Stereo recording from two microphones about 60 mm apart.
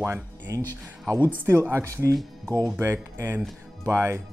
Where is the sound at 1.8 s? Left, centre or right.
Right.